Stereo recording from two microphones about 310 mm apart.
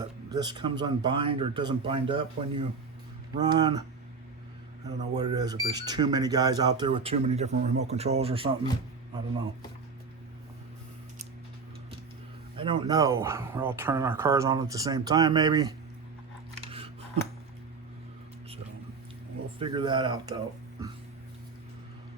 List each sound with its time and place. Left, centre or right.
0.3 s speech: centre
5.1 s speech: centre
12.5 s speech: centre
19.5 s speech: centre